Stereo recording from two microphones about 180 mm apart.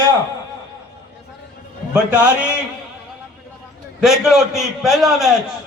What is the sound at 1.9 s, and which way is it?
Speech, 5° right (ahead or behind).